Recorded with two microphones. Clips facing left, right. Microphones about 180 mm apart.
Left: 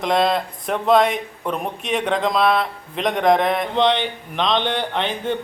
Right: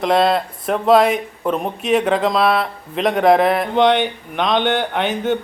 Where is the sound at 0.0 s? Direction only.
Centre (ahead or behind).